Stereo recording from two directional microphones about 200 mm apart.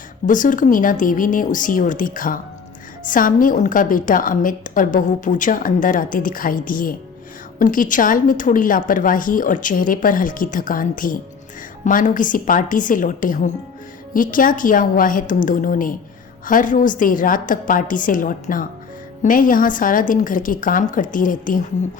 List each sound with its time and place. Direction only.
0.3 s a woman's voice: 40° left (ahead or behind)